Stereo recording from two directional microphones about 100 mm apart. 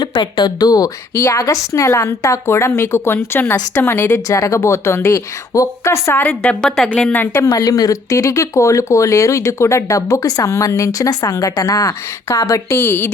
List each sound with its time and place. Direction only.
0.0 s speech: 50° left (ahead or behind)
1.1 s a woman's voice: 25° left (ahead or behind)
1.4 s a woman's voice: 35° left (ahead or behind)
6.2 s speech: 10° left (ahead or behind)
7.0 s speech: 20° left (ahead or behind)
7.4 s speech: 40° left (ahead or behind); by 13.1 s 25° left (ahead or behind)